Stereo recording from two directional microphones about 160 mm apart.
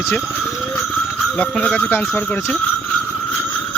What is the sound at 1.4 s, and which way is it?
Speech, 5° left (ahead or behind).